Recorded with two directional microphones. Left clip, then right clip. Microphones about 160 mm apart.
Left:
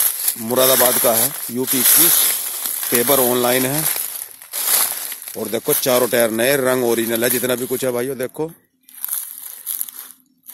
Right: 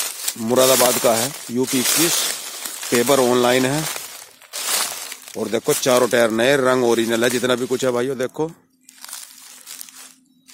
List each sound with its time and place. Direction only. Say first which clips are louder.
0.5 s speech: right 1 dB; centre (ahead or behind)
2.2 s a sound: left 1 dB; 55° left (ahead or behind)
2.9 s speech: right 1 dB; centre (ahead or behind)
3.8 s crumpling: left 1 dB; 60° left (ahead or behind)
5.3 s speech: right 1 dB; 5° left (ahead or behind)